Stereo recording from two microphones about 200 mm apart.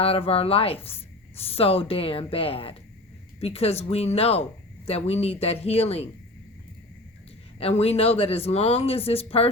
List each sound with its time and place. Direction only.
0.0 s speech: 30° left (ahead or behind)
7.6 s speech: 30° left (ahead or behind)